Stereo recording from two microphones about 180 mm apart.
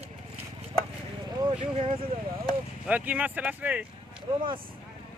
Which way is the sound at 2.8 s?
10° right (ahead or behind).